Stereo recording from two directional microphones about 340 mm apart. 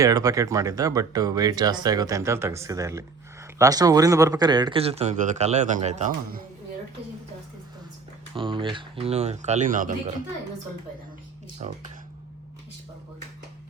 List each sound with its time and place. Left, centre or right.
0.0 s speech: centre
8.4 s speech: centre
11.6 s speech: right